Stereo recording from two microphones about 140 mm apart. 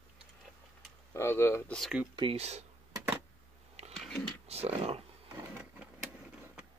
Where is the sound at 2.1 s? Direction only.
40° right (ahead or behind).